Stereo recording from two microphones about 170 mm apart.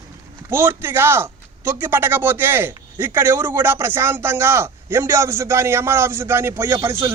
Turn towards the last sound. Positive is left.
turn(degrees=-15)  # may be behind; listen again after turning